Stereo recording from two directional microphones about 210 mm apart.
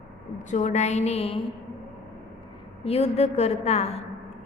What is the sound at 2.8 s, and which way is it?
A woman's voice, 30° left (ahead or behind).